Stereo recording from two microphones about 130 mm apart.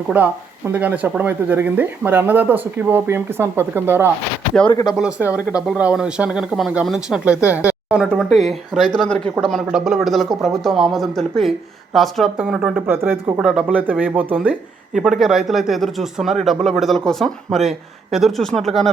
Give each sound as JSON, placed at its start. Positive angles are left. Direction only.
{"t": 0.1, "sound": "speech", "side_deg": -10}
{"t": 4.7, "sound": "speech", "side_deg": 30}
{"t": 4.9, "sound": "speech", "side_deg": -10}
{"t": 12.9, "sound": "speech", "side_deg": -15}
{"t": 13.3, "sound": "speech", "side_deg": -5}